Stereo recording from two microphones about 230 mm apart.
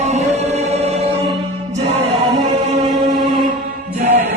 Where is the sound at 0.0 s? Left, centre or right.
Right.